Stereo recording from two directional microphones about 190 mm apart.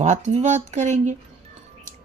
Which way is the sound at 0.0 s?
40° right (ahead or behind).